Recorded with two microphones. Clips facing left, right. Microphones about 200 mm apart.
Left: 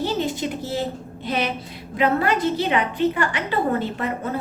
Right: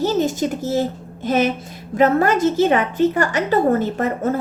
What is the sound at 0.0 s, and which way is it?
A woman's voice, 45° right (ahead or behind).